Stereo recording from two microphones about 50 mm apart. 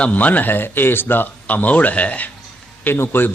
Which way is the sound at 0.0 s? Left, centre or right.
Left.